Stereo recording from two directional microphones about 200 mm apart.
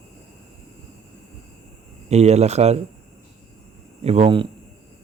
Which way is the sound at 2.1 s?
35° right (ahead or behind).